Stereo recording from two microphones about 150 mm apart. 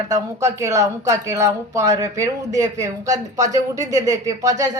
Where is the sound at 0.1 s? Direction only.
20° right (ahead or behind).